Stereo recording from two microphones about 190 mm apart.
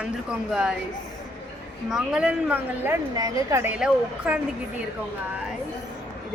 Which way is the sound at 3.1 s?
20° right (ahead or behind).